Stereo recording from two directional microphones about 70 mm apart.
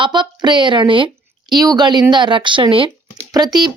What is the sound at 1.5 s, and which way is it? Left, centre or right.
Speech, right.